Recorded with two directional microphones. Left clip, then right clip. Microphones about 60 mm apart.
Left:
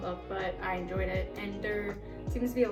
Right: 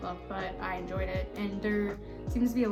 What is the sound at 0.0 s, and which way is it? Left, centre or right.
Music, right.